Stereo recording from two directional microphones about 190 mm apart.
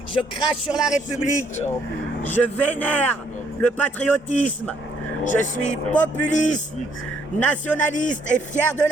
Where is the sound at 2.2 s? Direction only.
10° left (ahead or behind).